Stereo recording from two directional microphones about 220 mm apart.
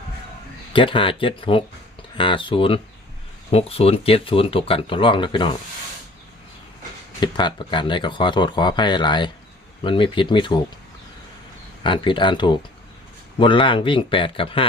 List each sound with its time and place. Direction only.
0.7 s speech: 25° left (ahead or behind)
7.2 s speech: 20° left (ahead or behind)
11.8 s speech: 20° left (ahead or behind)